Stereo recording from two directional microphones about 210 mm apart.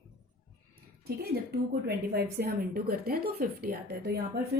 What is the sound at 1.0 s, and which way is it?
A woman's voice, 50° right (ahead or behind).